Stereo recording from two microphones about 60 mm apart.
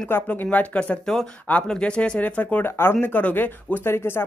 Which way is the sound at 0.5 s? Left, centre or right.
Left.